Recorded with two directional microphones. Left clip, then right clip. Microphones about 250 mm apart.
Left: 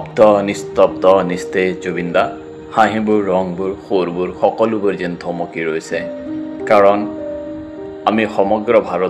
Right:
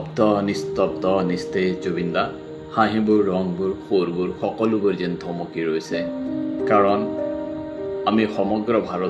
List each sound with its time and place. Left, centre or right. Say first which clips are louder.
0.2 s speech: left 9 dB; centre
8.0 s speech: left 7 dB; centre